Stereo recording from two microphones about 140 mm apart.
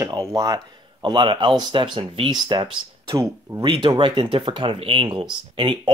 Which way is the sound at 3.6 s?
35° right (ahead or behind).